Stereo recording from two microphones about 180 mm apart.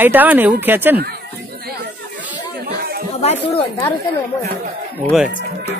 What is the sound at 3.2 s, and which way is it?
Speech, 35° left (ahead or behind).